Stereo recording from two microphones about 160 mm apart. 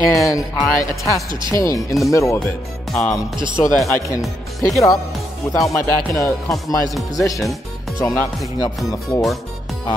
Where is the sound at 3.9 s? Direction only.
20° left (ahead or behind).